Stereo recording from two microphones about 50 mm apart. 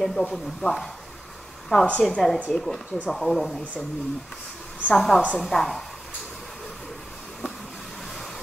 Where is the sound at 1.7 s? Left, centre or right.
Centre.